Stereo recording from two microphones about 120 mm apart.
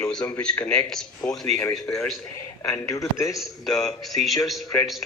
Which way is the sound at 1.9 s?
25° left (ahead or behind).